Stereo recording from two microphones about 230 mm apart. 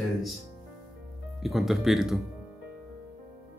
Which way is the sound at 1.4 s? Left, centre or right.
Centre.